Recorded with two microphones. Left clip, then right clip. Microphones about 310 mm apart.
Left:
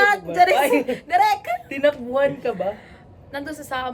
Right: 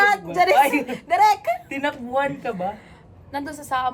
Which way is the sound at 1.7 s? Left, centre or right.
Centre.